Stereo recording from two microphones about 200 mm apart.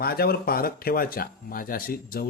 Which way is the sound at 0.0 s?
50° left (ahead or behind).